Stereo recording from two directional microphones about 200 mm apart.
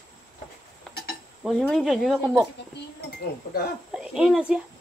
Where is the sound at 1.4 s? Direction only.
Centre (ahead or behind).